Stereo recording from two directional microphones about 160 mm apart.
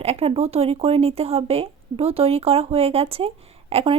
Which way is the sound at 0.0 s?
40° right (ahead or behind).